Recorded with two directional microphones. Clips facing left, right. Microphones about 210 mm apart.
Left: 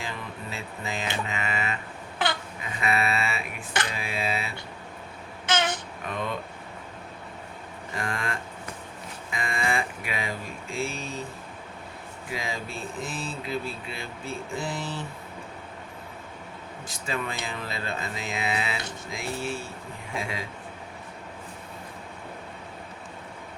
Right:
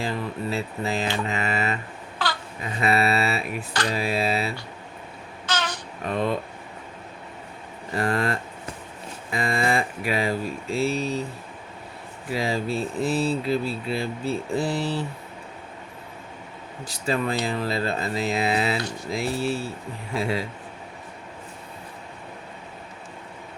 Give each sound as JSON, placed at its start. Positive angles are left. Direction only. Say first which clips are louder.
{"t": 0.0, "sound": "speech", "louder": "right 8 dB", "side_deg": -35}
{"t": 2.2, "sound": "babbling", "louder": "left 1 dB", "side_deg": 20}
{"t": 2.8, "sound": "speech", "louder": "right 5 dB", "side_deg": -35}
{"t": 5.5, "sound": "babbling", "louder": "left 2 dB", "side_deg": 20}
{"t": 6.1, "sound": "speech", "louder": "right 7 dB", "side_deg": -35}
{"t": 7.9, "sound": "speech", "louder": "right 8 dB", "side_deg": -35}
{"t": 12.3, "sound": "speech", "louder": "right 9 dB", "side_deg": -35}
{"t": 16.8, "sound": "speech", "louder": "right 7 dB", "side_deg": -35}